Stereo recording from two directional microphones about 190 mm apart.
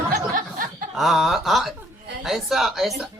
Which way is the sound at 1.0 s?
Centre (ahead or behind).